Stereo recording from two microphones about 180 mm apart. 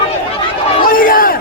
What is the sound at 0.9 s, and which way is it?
Battle cry, 50° left (ahead or behind).